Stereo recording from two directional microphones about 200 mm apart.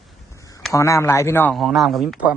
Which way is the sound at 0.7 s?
15° left (ahead or behind).